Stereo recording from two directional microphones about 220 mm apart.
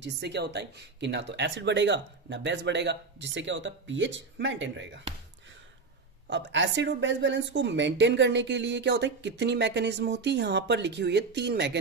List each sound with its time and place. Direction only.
0.0 s a woman's voice: 50° right (ahead or behind)
6.2 s a woman's voice: 55° right (ahead or behind)